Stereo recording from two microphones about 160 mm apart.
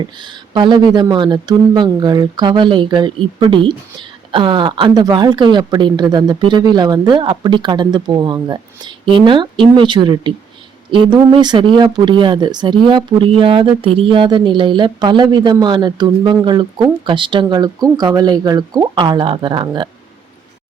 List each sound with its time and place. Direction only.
0.5 s speech: 30° right (ahead or behind)